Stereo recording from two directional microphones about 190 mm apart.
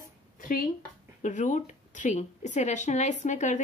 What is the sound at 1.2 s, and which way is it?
Speech, 40° left (ahead or behind).